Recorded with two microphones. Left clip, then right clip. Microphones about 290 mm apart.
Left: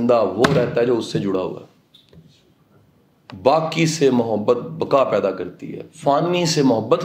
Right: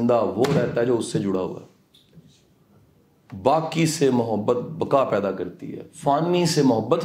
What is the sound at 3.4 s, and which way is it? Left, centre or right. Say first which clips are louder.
A man's voice: left 4 dB; centre.